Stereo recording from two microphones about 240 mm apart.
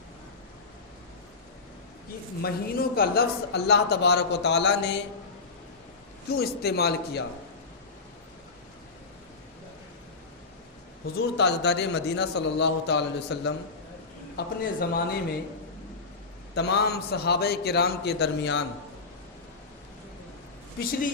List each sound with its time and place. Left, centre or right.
2.4 s speech: left
6.3 s a man's voice: left
11.0 s a man's voice: left
16.6 s speech: left